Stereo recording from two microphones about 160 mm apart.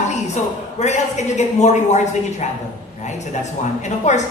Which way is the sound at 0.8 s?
45° left (ahead or behind).